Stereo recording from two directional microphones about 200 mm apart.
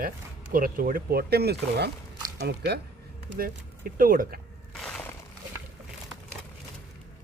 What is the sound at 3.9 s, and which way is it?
Speech, 45° right (ahead or behind).